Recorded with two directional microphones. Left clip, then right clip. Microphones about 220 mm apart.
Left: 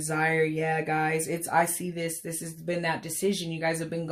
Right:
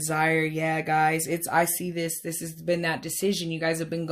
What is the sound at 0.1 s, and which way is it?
Speech, 35° right (ahead or behind).